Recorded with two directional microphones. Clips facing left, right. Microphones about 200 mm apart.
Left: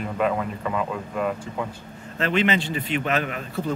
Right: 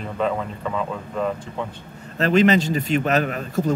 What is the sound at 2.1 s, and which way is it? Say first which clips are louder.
A man's voice: right 6 dB; 40° right (ahead or behind).